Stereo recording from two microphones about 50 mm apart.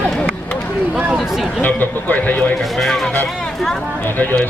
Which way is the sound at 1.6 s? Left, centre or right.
Left.